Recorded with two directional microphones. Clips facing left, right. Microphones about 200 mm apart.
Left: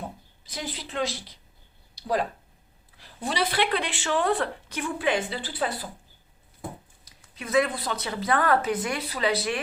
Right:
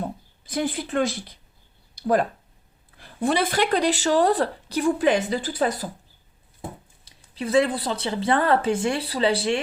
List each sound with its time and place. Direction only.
0.4 s speech: 50° right (ahead or behind)
6.6 s speech: 25° right (ahead or behind)